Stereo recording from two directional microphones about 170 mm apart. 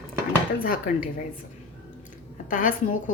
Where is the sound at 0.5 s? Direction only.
55° left (ahead or behind).